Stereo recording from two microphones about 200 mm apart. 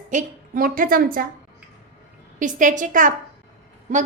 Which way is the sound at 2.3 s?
40° right (ahead or behind).